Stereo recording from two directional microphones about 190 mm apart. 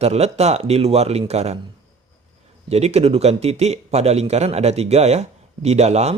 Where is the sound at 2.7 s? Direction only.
35° right (ahead or behind).